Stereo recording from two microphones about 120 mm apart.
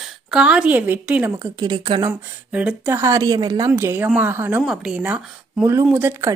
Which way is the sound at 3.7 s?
20° right (ahead or behind).